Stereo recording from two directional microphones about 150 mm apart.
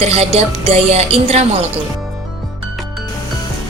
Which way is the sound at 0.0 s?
45° right (ahead or behind).